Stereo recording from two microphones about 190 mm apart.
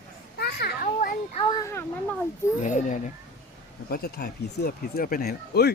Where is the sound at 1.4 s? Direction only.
20° left (ahead or behind).